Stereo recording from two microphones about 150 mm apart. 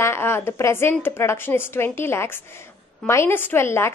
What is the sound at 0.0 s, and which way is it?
A woman's voice, 15° left (ahead or behind).